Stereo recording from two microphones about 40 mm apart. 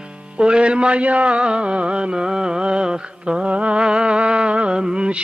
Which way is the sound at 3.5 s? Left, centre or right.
Right.